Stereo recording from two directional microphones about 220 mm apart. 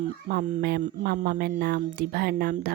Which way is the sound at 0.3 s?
40° right (ahead or behind).